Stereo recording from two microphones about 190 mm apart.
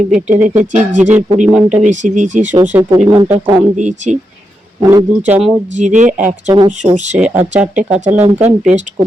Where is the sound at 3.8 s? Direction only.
40° right (ahead or behind).